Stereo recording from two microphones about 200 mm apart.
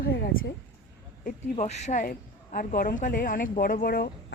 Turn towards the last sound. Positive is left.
turn(degrees=50)  # may be behind; listen again after turning